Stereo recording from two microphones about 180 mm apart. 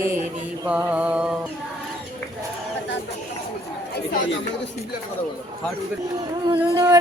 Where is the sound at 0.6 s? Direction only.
10° right (ahead or behind).